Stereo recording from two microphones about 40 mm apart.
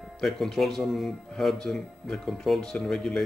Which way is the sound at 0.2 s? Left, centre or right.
Centre.